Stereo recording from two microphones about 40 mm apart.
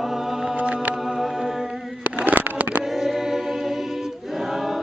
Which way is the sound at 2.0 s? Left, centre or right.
Right.